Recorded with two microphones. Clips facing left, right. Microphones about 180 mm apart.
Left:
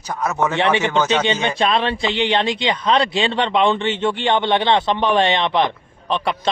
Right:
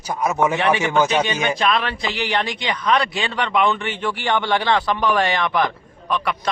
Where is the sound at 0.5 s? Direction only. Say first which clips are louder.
Even; 25° left (ahead or behind).